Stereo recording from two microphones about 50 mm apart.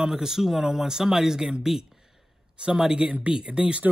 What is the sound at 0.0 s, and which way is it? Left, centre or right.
Speech, centre.